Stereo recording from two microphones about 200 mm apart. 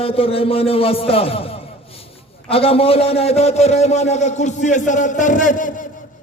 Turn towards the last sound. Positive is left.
turn(degrees=40)  # may be behind; listen again after turning